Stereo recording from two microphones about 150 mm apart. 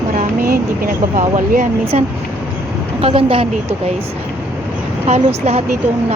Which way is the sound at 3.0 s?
35° right (ahead or behind).